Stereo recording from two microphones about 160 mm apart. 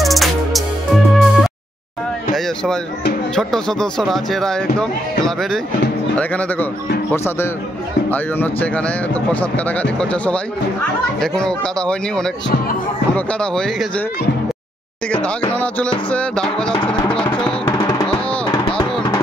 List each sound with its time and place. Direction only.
0.0 s music: centre (ahead or behind)
2.3 s speech: 5° left (ahead or behind)
15.2 s speech: 10° left (ahead or behind)
17.6 s music: 20° left (ahead or behind)